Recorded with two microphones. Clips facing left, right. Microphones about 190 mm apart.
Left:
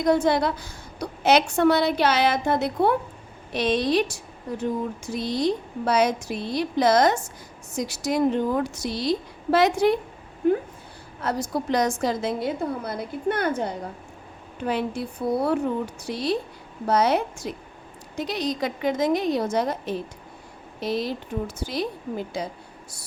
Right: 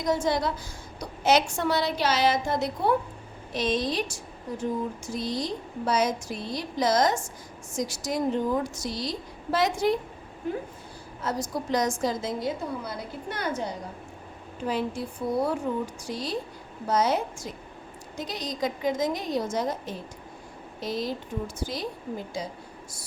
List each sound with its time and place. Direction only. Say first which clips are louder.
0.0 s a woman's voice: left 5 dB; 60° left (ahead or behind)
11.2 s a woman's voice: left 4 dB; 65° left (ahead or behind)
16.0 s a woman's voice: left 5 dB; 65° left (ahead or behind)